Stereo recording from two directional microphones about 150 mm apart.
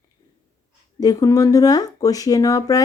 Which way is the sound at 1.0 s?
25° left (ahead or behind).